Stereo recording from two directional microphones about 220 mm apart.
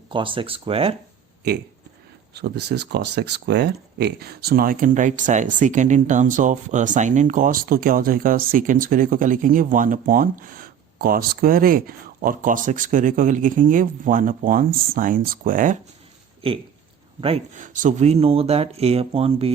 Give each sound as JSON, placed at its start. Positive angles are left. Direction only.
{"t": 0.1, "sound": "speech", "side_deg": -25}
{"t": 2.3, "sound": "speech", "side_deg": -50}
{"t": 16.4, "sound": "speech", "side_deg": -25}